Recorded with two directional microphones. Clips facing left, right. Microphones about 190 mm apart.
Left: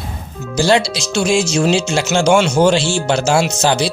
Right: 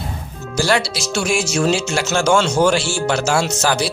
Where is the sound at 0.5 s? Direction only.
20° left (ahead or behind).